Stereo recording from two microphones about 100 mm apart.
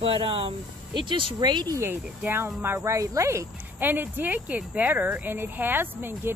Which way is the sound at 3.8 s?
20° right (ahead or behind).